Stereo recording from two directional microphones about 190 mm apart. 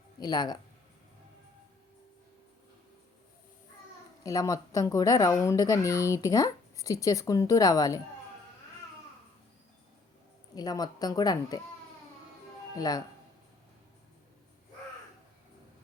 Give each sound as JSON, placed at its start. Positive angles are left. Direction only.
{"t": 0.2, "sound": "speech", "side_deg": 20}
{"t": 4.2, "sound": "speech", "side_deg": 20}
{"t": 10.5, "sound": "speech", "side_deg": 20}
{"t": 12.7, "sound": "speech", "side_deg": 20}